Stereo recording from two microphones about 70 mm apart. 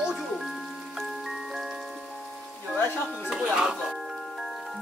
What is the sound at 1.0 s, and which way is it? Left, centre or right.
Glockenspiel, centre.